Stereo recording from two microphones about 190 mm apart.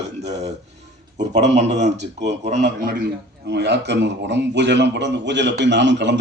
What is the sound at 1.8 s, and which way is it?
Speech, 65° right (ahead or behind).